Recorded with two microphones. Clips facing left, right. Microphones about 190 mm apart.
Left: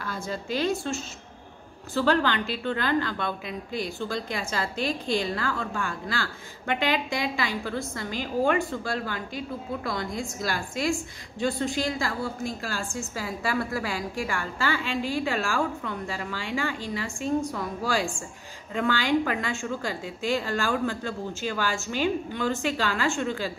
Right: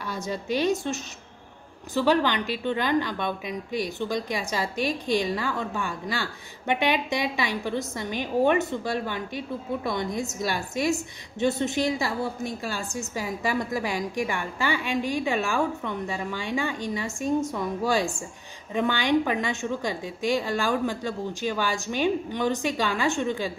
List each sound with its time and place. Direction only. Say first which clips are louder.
0.0 s a woman's voice: right 2 dB; 20° right (ahead or behind)